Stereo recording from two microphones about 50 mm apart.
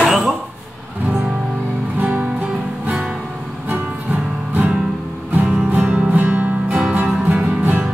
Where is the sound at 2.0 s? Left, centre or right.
Right.